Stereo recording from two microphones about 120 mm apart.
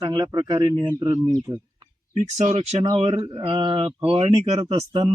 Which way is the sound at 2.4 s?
70° right (ahead or behind).